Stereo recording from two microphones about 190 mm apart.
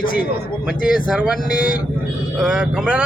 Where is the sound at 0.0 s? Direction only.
45° left (ahead or behind).